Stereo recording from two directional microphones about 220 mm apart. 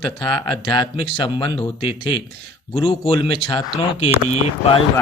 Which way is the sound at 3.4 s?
25° left (ahead or behind).